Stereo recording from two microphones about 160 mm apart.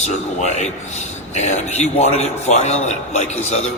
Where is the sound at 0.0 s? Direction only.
45° left (ahead or behind).